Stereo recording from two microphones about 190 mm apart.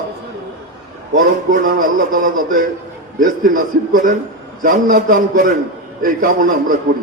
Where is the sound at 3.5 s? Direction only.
45° right (ahead or behind).